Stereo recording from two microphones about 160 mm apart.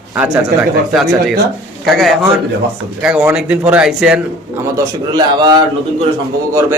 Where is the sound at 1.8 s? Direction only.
Centre (ahead or behind).